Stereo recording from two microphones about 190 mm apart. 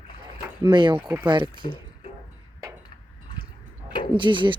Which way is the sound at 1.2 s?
25° right (ahead or behind).